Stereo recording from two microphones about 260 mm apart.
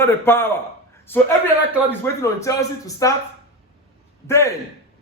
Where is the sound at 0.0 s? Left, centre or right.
Centre.